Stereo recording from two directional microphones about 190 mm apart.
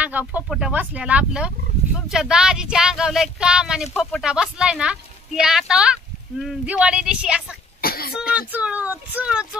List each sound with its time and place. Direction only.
0.0 s speech: 10° right (ahead or behind)
7.8 s cough: 50° left (ahead or behind)
8.4 s speech: 10° right (ahead or behind)